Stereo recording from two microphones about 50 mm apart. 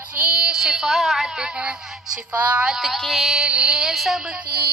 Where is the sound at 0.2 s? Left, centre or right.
Centre.